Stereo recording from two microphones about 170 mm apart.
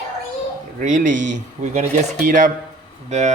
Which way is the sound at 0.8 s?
50° right (ahead or behind).